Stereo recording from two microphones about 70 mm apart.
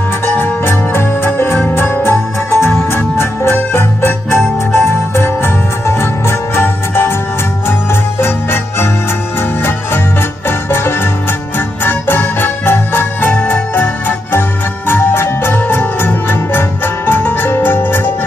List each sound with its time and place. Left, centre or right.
0.2 s music: left